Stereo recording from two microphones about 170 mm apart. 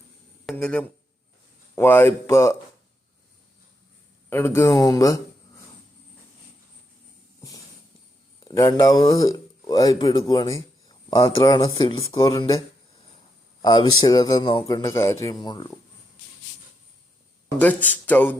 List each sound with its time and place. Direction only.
0.4 s a sound: 5° left (ahead or behind)
1.7 s speech: 15° left (ahead or behind)
4.3 s speech: 15° left (ahead or behind)
8.4 s speech: 20° left (ahead or behind)
13.6 s speech: 25° left (ahead or behind)
17.6 s speech: 10° left (ahead or behind)